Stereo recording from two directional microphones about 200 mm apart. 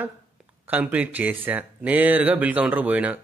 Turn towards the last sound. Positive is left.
turn(degrees=-5)  # may be behind; listen again after turning